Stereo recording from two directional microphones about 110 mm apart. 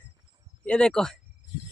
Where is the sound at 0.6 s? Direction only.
10° left (ahead or behind).